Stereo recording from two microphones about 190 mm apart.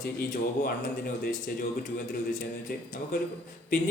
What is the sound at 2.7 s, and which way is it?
Speech, 50° left (ahead or behind).